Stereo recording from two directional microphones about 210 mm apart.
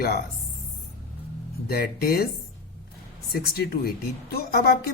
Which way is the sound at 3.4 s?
45° left (ahead or behind).